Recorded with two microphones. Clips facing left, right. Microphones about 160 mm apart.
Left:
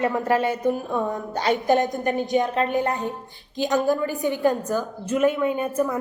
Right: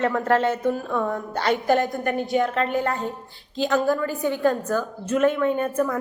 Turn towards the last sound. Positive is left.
turn(degrees=10)  # may be behind; listen again after turning